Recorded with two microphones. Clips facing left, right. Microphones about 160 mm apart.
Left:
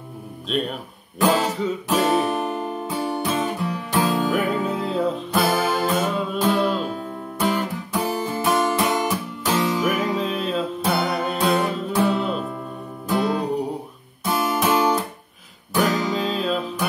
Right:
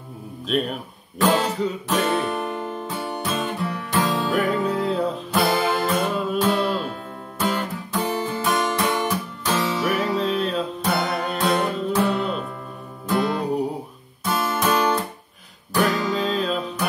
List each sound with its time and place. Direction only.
1.2 s music: centre (ahead or behind)
14.2 s guitar: 15° left (ahead or behind)
15.7 s music: 5° left (ahead or behind)